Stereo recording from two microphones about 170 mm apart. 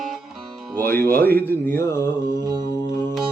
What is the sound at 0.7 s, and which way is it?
Music, 10° left (ahead or behind).